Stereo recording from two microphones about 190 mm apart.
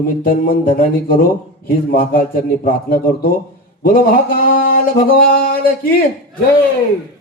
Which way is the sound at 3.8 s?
50° left (ahead or behind).